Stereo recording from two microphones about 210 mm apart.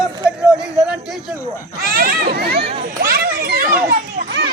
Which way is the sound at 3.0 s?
45° right (ahead or behind).